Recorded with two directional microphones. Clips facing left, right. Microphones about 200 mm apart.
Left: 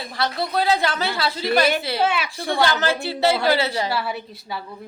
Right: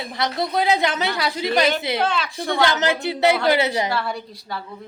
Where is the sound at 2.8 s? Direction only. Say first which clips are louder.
Right 1 dB; 20° right (ahead or behind).